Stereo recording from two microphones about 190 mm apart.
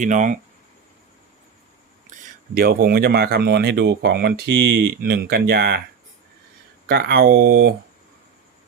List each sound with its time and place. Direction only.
0.0 s speech: 40° right (ahead or behind)
2.0 s speech: 45° right (ahead or behind)
6.8 s speech: 55° right (ahead or behind)